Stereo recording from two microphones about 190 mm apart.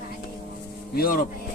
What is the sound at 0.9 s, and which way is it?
Speech, 50° left (ahead or behind).